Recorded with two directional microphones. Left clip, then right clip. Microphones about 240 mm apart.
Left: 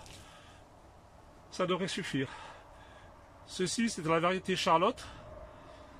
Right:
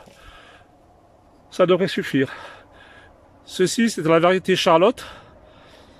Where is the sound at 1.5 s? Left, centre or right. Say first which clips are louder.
Right 15 dB; right.